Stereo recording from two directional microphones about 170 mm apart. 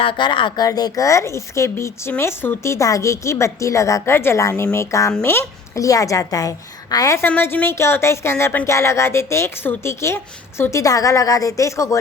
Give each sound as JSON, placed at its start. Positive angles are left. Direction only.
{"t": 0.0, "sound": "a woman's voice", "side_deg": 30}